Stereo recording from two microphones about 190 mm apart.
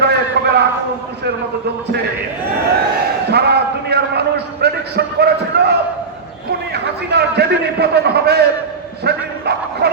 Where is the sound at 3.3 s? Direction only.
60° right (ahead or behind).